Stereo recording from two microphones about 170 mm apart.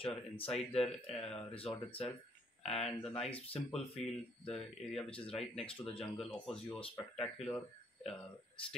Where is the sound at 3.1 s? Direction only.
35° left (ahead or behind).